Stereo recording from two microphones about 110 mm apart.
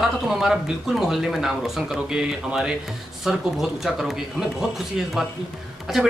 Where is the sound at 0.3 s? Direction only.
Centre (ahead or behind).